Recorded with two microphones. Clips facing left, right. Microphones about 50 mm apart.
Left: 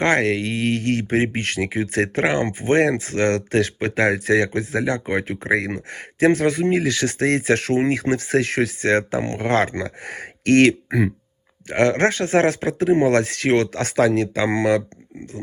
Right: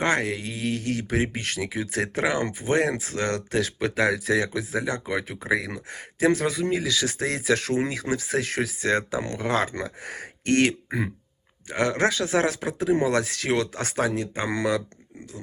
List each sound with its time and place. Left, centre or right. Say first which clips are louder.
0.0 s speech: left 6 dB; left